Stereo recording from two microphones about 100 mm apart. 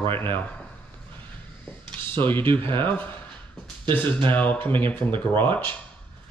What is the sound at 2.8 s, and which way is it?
Speech, 20° left (ahead or behind).